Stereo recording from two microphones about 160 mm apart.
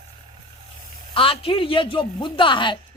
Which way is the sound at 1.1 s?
35° left (ahead or behind).